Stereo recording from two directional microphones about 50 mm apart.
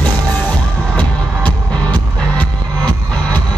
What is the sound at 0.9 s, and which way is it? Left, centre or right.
Music, left.